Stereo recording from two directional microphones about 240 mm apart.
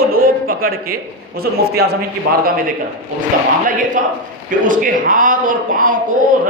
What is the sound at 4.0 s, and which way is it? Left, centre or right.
A man's voice, right.